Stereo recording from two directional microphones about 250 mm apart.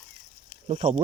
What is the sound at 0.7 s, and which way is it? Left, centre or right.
Speech, right.